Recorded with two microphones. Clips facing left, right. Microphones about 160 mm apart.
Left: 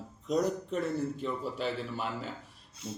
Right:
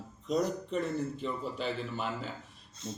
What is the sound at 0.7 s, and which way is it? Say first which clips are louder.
Speech: right 1 dB; 40° left (ahead or behind).